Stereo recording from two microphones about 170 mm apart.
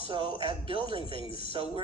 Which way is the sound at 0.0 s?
30° right (ahead or behind).